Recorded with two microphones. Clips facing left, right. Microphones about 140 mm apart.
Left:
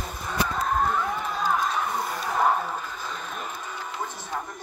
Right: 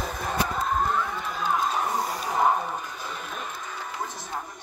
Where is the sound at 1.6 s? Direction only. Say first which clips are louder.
Right 1 dB; 35° right (ahead or behind).